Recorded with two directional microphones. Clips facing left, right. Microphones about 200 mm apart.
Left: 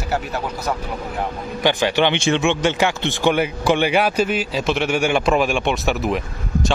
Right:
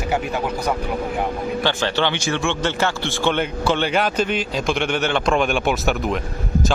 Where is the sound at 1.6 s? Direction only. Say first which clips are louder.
Left 5 dB; 15° left (ahead or behind).